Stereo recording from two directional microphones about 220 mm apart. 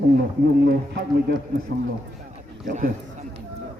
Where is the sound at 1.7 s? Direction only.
40° right (ahead or behind).